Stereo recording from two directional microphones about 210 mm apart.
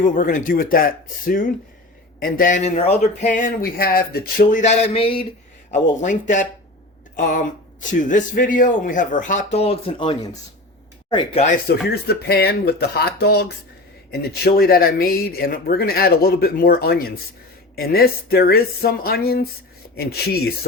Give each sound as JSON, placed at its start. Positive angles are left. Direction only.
{"t": 0.0, "sound": "speech", "side_deg": 40}
{"t": 3.3, "sound": "speech", "side_deg": 40}
{"t": 11.9, "sound": "speech", "side_deg": 50}